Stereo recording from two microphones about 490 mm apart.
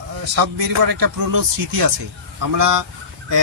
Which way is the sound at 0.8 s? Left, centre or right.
Right.